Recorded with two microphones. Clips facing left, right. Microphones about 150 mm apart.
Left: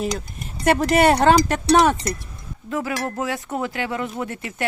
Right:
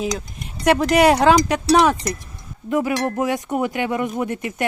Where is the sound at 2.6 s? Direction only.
15° right (ahead or behind).